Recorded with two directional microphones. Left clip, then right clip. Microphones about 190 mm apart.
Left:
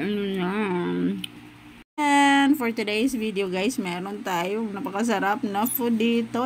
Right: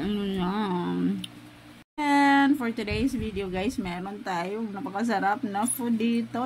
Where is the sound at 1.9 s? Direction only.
10° left (ahead or behind).